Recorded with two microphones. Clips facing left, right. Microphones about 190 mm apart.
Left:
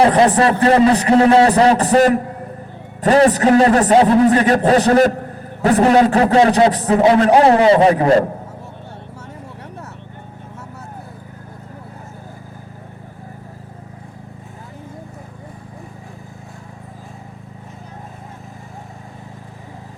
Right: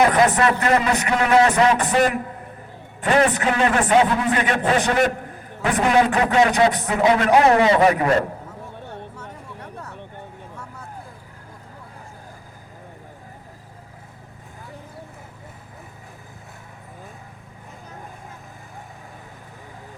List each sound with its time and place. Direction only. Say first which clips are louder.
0.0 s a man's voice: left 4 dB; 30° left (ahead or behind)